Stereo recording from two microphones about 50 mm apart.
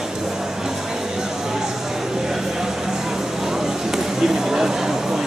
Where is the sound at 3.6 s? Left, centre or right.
Centre.